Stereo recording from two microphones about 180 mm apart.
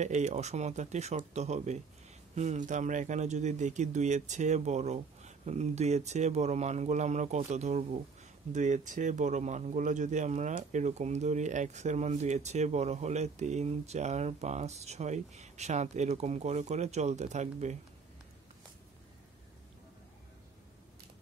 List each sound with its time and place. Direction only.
0.0 s speech: 40° right (ahead or behind)